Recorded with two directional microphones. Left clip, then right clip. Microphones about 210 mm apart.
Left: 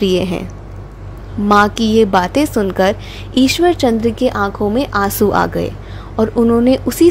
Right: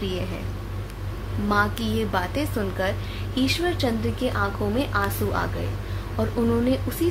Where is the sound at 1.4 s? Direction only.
40° left (ahead or behind).